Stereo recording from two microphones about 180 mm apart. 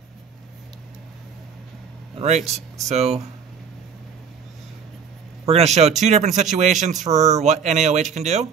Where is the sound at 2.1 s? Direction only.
35° right (ahead or behind).